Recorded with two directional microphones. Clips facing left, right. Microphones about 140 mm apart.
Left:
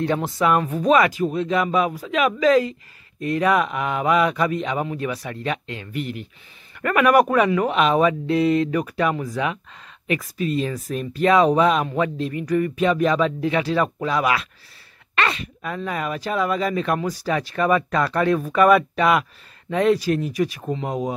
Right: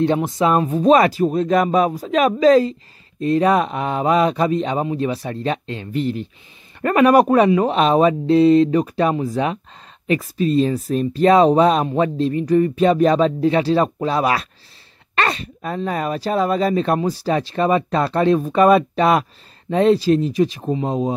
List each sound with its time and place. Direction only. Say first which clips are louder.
0.0 s speech: right 4 dB; 25° right (ahead or behind)